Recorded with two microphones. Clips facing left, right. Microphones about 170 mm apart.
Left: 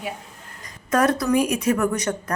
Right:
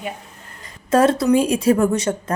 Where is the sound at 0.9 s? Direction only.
25° right (ahead or behind).